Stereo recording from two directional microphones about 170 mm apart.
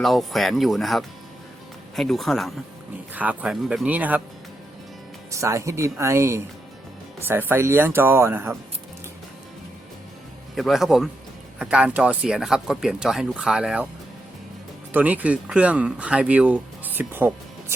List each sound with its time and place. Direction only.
0.0 s speech: centre (ahead or behind)
5.3 s speech: 15° right (ahead or behind)
10.5 s speech: centre (ahead or behind)
14.9 s speech: 10° right (ahead or behind)